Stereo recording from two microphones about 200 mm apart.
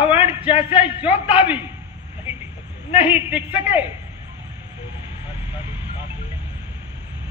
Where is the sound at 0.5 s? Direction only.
25° left (ahead or behind).